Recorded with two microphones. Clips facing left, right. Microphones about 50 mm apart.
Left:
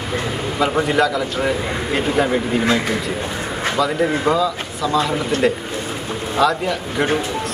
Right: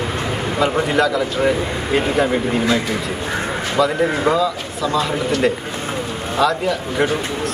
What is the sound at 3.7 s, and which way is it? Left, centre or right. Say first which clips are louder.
A man's voice: right 2 dB; centre.